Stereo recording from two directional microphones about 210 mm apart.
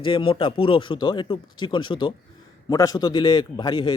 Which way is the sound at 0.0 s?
25° left (ahead or behind).